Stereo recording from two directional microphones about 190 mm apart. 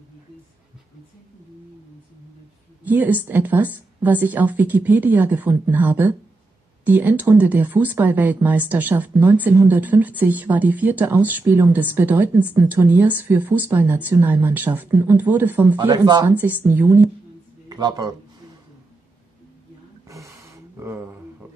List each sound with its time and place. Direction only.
2.8 s speech: 10° right (ahead or behind)
15.8 s speech: 20° right (ahead or behind)
16.3 s speech: 10° right (ahead or behind)
17.6 s speech: 20° right (ahead or behind)
20.1 s a sound: 15° right (ahead or behind)